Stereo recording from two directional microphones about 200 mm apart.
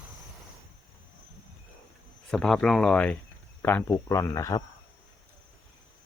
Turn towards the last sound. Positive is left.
turn(degrees=15)  # may be behind; listen again after turning